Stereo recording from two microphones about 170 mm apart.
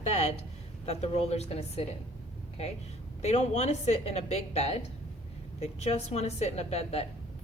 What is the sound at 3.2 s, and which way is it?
A woman's voice, 40° left (ahead or behind).